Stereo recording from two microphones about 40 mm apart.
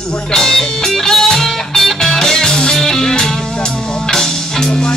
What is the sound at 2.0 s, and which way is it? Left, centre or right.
Music, centre.